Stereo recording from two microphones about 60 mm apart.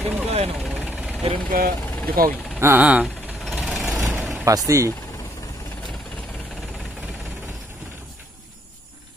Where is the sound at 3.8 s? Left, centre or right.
Right.